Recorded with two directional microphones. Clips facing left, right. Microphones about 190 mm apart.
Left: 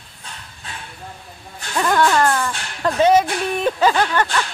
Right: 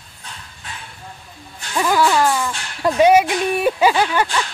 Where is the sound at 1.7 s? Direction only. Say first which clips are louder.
Even; 5° right (ahead or behind).